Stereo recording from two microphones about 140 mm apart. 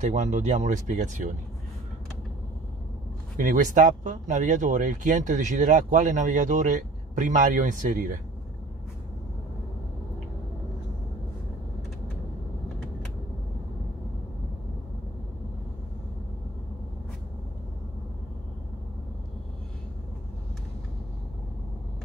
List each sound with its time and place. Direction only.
0.0 s speech: 60° right (ahead or behind)
3.3 s speech: 75° right (ahead or behind)